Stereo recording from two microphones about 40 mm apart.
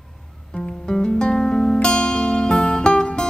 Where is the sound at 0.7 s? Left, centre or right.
Centre.